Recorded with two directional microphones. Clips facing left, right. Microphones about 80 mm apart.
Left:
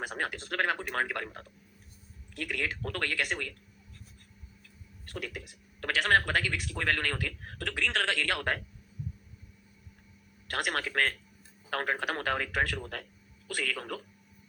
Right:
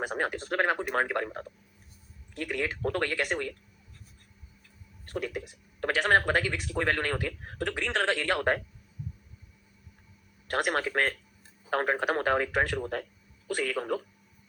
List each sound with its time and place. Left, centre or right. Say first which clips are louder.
0.0 s speech: right 4 dB; right
5.0 s speech: right 6 dB; right
10.5 s speech: right 4 dB; right